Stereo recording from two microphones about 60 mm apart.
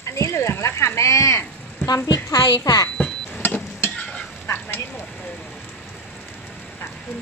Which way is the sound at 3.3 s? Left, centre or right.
Left.